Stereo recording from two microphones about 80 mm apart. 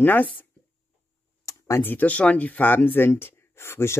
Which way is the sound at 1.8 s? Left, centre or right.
Left.